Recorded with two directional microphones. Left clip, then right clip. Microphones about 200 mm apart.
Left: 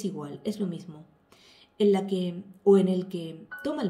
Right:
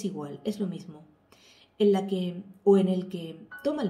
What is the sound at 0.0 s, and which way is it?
Speech, 40° left (ahead or behind).